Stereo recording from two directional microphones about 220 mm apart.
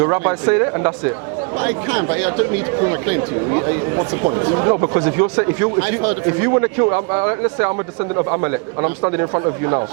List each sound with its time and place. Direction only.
0.0 s speech: 20° right (ahead or behind)